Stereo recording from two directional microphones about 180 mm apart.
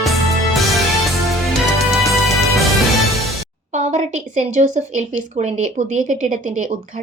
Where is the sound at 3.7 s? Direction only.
40° right (ahead or behind).